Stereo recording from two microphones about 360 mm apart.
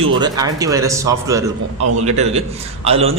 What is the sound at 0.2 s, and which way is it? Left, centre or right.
A man's voice, centre.